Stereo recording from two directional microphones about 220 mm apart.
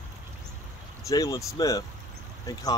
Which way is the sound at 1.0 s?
15° left (ahead or behind).